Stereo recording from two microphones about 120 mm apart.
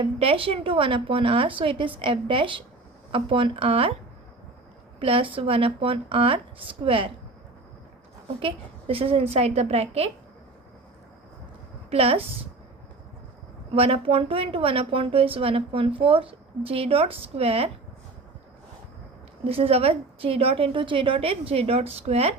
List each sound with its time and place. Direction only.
0.0 s a woman's voice: 50° right (ahead or behind)
4.9 s a woman's voice: 50° right (ahead or behind)
8.4 s a woman's voice: 50° right (ahead or behind)
11.9 s a woman's voice: 55° right (ahead or behind)
13.7 s a woman's voice: 55° right (ahead or behind)
19.5 s a woman's voice: 55° right (ahead or behind)